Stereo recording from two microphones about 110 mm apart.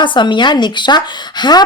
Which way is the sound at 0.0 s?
45° left (ahead or behind).